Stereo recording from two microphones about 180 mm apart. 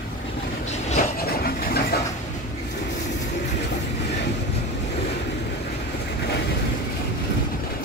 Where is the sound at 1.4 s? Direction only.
60° left (ahead or behind).